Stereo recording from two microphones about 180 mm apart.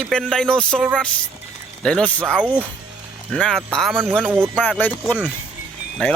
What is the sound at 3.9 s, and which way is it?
Speech, 10° right (ahead or behind).